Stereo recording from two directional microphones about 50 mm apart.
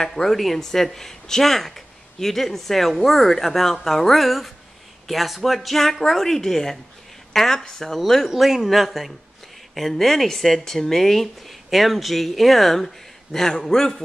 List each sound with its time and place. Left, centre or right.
0.0 s speech: centre
8.3 s speech: centre